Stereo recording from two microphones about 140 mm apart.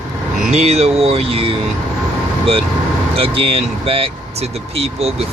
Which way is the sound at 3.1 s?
40° right (ahead or behind).